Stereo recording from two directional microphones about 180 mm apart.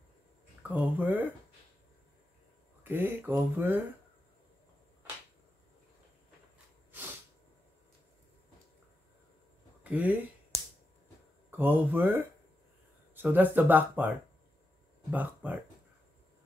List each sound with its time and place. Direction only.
0.7 s speech: 10° right (ahead or behind)
2.8 s speech: 10° right (ahead or behind)
9.8 s a sound: 10° right (ahead or behind)
11.5 s speech: 10° right (ahead or behind)